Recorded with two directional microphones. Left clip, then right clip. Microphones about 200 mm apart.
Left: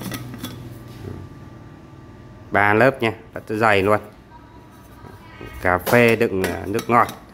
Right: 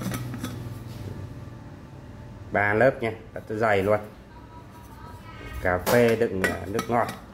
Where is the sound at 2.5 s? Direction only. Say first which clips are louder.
Left 5 dB; 35° left (ahead or behind).